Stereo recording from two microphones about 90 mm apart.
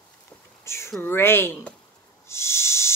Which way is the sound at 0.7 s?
30° left (ahead or behind).